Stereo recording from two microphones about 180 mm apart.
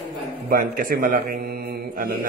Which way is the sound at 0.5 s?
50° right (ahead or behind).